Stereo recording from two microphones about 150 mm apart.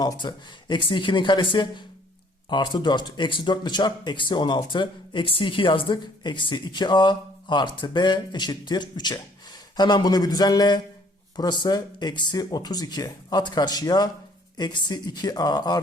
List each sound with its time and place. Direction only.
0.0 s speech: 30° left (ahead or behind)